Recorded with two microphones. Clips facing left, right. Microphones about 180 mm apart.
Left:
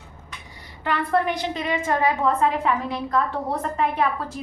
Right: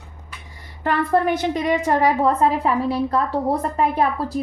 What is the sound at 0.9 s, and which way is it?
A woman's voice, 40° right (ahead or behind).